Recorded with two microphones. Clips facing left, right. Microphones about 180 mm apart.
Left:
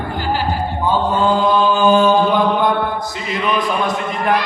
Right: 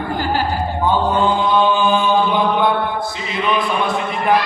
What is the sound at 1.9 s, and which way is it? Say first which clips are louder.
Mantra: left 5 dB; 40° left (ahead or behind).